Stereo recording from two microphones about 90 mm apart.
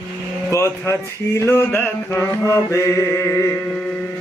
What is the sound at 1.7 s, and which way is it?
Mantra, 25° left (ahead or behind).